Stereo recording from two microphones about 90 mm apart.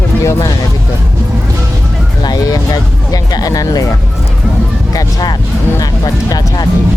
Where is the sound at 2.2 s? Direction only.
45° left (ahead or behind).